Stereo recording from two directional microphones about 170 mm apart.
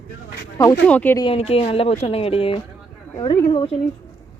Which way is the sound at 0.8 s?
10° left (ahead or behind).